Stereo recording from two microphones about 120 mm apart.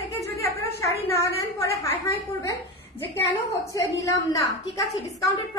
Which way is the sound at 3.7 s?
25° left (ahead or behind).